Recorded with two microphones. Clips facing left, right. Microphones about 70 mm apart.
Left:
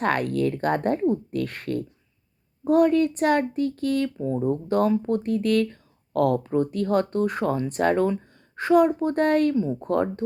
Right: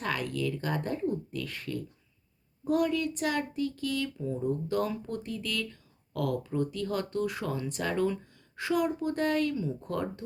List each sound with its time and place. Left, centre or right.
0.0 s a woman's voice: left